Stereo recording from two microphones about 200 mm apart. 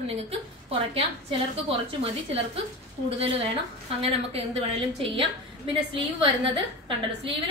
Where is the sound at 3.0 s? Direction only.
30° right (ahead or behind).